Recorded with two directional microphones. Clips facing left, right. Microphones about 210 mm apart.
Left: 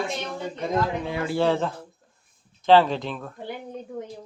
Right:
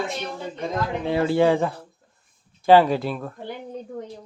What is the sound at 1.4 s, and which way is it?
Speech, 10° right (ahead or behind).